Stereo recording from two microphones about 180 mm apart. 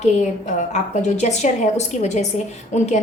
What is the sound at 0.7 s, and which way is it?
A woman's voice, 40° left (ahead or behind).